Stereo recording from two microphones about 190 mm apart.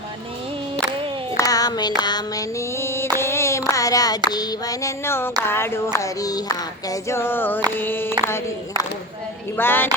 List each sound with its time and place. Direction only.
1.4 s music: 20° left (ahead or behind)
3.7 s a sound: 20° left (ahead or behind)
4.3 s child singing: 20° left (ahead or behind)
9.6 s child singing: 10° left (ahead or behind)